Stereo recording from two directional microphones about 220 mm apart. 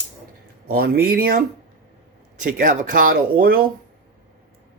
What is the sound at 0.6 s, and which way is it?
Speech, 45° right (ahead or behind).